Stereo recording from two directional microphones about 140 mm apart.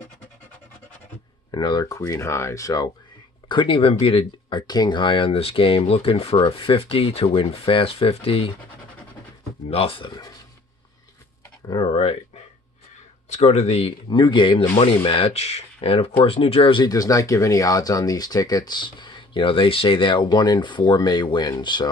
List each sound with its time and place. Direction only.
1.5 s speech: 30° left (ahead or behind)
3.4 s speech: 35° left (ahead or behind)
9.7 s speech: 40° left (ahead or behind)
11.6 s speech: 35° left (ahead or behind)
13.3 s speech: 50° left (ahead or behind); by 21.8 s 30° left (ahead or behind)